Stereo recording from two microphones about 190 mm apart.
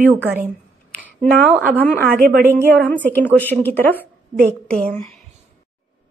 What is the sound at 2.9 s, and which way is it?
A woman's voice, 10° left (ahead or behind).